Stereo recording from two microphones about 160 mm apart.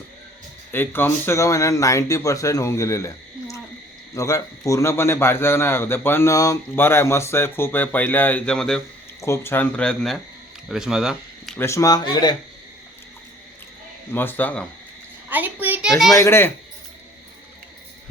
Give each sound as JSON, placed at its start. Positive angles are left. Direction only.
{"t": 0.7, "sound": "a man's voice", "side_deg": 15}
{"t": 9.2, "sound": "a man's voice", "side_deg": 15}
{"t": 11.6, "sound": "speech", "side_deg": 20}
{"t": 14.1, "sound": "a man's voice", "side_deg": 10}
{"t": 15.3, "sound": "a sound", "side_deg": -10}
{"t": 16.1, "sound": "a man's voice", "side_deg": 15}